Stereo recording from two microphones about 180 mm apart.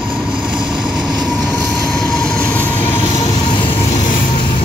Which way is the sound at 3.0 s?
20° left (ahead or behind).